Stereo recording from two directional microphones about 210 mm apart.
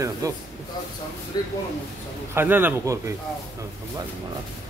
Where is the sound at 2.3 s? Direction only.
10° right (ahead or behind).